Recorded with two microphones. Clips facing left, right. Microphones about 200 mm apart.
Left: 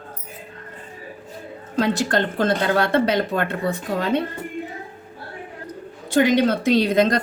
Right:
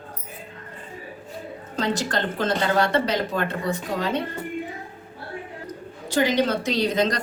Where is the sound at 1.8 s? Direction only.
60° left (ahead or behind).